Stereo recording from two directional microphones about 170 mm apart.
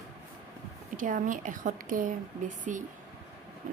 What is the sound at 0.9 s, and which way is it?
A woman's voice, 50° right (ahead or behind).